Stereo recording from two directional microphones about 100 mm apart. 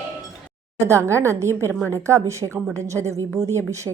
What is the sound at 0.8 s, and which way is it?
Speech, 30° right (ahead or behind).